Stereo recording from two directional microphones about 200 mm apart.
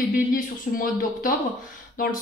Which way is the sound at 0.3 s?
45° left (ahead or behind).